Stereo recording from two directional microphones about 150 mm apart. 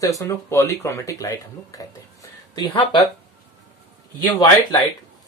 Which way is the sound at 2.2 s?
30° left (ahead or behind).